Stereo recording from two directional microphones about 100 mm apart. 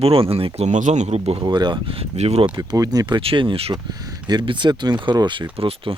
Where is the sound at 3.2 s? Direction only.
60° right (ahead or behind).